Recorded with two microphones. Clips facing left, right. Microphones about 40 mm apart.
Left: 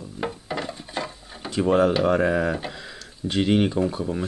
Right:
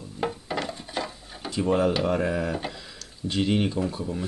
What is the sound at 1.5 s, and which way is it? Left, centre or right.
Speech, centre.